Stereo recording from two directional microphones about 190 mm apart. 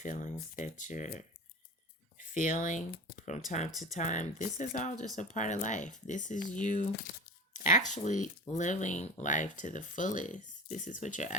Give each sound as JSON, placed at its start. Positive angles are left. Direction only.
{"t": 0.0, "sound": "speech", "side_deg": 40}